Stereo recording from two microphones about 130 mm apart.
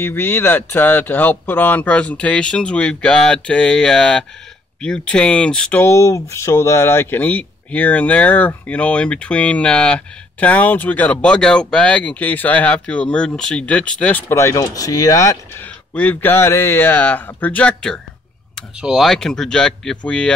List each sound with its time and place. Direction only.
0.0 s speech: 15° left (ahead or behind)
14.3 s speech: 20° left (ahead or behind)
15.9 s speech: 10° left (ahead or behind)
18.8 s speech: 5° right (ahead or behind)